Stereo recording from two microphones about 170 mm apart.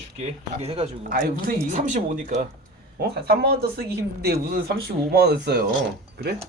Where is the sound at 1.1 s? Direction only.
55° right (ahead or behind).